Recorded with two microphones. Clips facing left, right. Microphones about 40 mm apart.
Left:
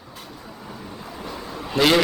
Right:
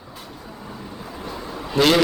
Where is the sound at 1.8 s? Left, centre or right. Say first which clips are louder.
Right 1 dB; centre.